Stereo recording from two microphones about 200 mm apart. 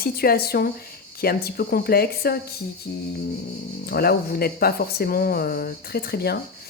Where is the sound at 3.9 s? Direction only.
50° left (ahead or behind).